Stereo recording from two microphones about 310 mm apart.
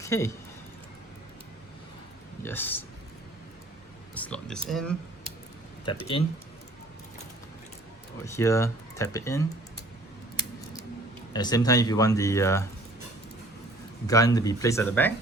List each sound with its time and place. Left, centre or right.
0.0 s speech: centre
2.4 s speech: centre
4.1 s speech: centre
5.8 s speech: centre
8.2 s speech: centre
11.3 s speech: centre
14.1 s speech: centre